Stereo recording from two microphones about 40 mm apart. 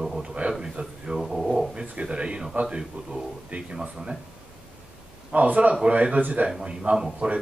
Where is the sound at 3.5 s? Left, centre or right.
Right.